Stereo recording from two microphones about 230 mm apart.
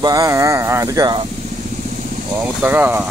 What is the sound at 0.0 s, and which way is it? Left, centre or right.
Speech, centre.